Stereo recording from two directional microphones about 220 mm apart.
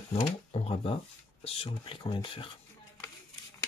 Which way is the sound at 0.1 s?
25° left (ahead or behind).